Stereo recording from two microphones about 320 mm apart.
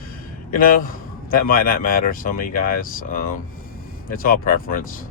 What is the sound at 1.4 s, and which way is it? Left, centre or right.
Speech, left.